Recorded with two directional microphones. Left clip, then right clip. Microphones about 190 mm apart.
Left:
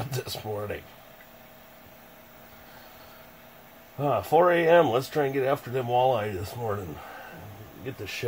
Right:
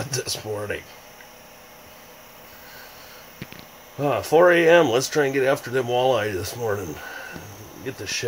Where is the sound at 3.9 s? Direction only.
5° right (ahead or behind).